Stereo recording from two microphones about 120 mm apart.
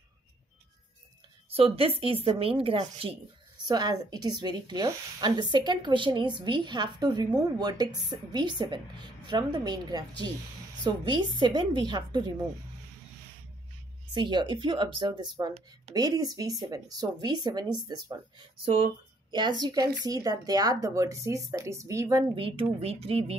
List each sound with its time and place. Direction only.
1.5 s a woman's voice: 50° right (ahead or behind)
3.6 s a woman's voice: 35° right (ahead or behind)
14.1 s a woman's voice: 40° right (ahead or behind)
19.3 s speech: 35° right (ahead or behind)
22.3 s speech: 50° right (ahead or behind)